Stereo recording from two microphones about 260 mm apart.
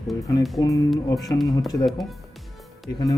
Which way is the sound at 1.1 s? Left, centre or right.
Centre.